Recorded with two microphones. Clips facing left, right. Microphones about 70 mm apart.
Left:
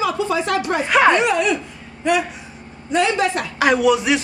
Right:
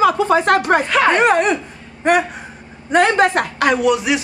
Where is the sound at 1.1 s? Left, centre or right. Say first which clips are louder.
Right 3 dB; right.